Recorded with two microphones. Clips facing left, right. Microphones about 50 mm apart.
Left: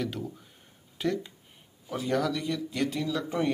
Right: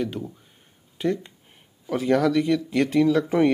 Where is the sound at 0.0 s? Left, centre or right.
Centre.